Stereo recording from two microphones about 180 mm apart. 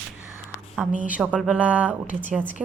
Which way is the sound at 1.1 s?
5° right (ahead or behind).